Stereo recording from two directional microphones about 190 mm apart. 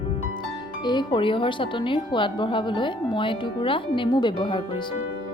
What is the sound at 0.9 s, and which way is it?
Speech, 25° left (ahead or behind).